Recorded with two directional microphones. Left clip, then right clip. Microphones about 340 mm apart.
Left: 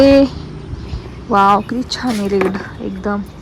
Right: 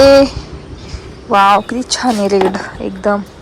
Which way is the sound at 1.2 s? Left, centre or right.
Centre.